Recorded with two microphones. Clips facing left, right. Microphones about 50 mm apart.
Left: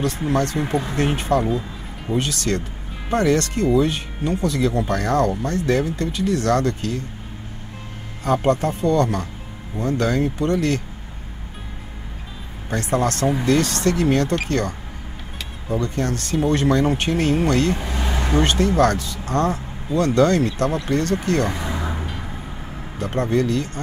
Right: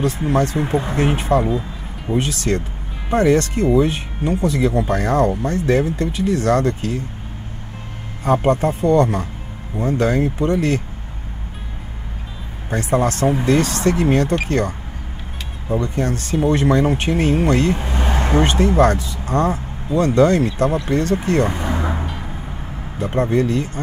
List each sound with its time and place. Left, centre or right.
0.0 s speech: right
8.5 s speech: right
12.6 s speech: right
15.7 s speech: right